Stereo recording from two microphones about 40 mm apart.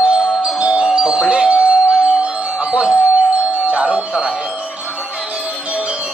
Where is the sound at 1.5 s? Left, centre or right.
Right.